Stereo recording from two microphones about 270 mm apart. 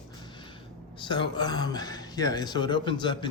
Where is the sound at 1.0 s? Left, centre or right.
Centre.